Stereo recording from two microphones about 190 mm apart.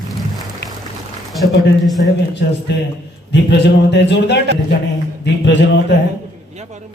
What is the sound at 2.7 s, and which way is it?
A man's voice, 65° left (ahead or behind).